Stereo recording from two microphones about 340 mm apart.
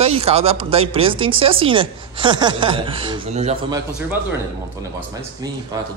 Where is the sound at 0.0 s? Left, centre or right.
Centre.